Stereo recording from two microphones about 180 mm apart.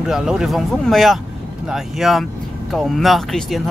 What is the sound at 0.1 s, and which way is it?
Speech, 5° right (ahead or behind).